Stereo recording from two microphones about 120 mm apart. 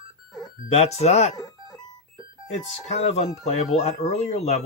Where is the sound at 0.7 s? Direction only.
65° left (ahead or behind).